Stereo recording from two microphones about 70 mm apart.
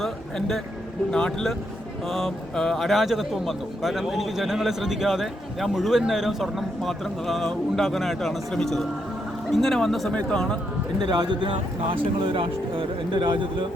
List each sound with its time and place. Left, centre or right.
0.0 s a man's voice: centre
10.1 s speech: centre
11.0 s speech: right